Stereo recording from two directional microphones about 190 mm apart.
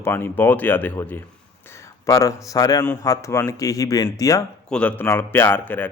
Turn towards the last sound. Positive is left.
turn(degrees=10)  # may be behind; listen again after turning